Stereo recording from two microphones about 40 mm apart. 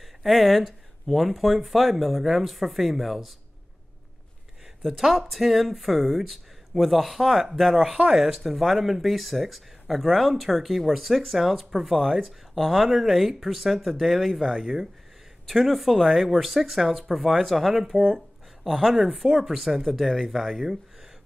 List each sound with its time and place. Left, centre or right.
0.2 s speech: centre
4.8 s speech: centre
15.4 s speech: centre
17.9 s speech: right
18.6 s speech: centre